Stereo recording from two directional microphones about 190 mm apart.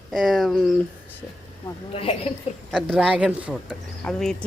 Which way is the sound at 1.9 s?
30° left (ahead or behind).